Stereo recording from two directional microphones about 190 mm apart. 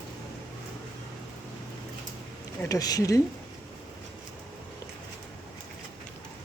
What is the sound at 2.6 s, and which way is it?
Speech, 20° left (ahead or behind).